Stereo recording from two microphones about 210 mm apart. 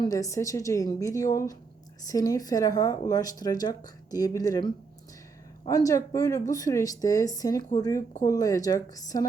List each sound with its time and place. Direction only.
0.0 s speech: 15° left (ahead or behind)